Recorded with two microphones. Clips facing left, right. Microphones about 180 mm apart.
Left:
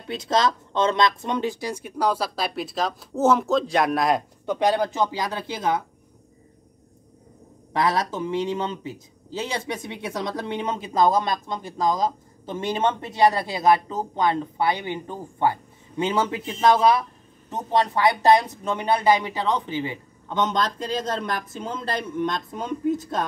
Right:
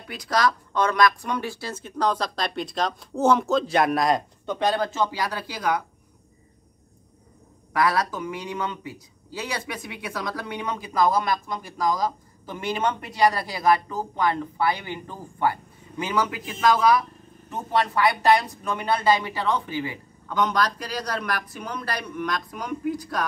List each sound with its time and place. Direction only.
0.1 s speech: 25° left (ahead or behind)
7.7 s speech: 25° left (ahead or behind)